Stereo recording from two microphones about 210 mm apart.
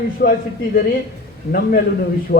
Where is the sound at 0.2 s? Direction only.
45° left (ahead or behind).